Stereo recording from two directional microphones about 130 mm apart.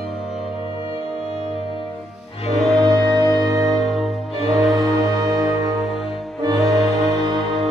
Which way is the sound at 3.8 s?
Centre (ahead or behind).